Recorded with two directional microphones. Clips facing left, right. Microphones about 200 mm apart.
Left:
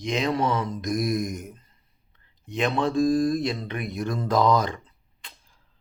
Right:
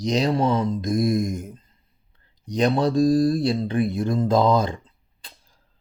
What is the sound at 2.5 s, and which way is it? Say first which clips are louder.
Speech: right 4 dB; 40° right (ahead or behind).